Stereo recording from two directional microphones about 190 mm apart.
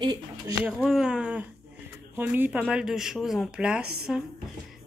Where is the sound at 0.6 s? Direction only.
Centre (ahead or behind).